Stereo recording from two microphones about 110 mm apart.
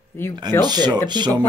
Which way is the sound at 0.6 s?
40° right (ahead or behind).